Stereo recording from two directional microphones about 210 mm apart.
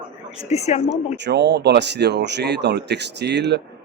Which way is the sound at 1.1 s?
55° right (ahead or behind).